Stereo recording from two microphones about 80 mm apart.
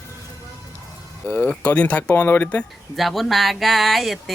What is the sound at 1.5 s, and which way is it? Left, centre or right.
Speech, centre.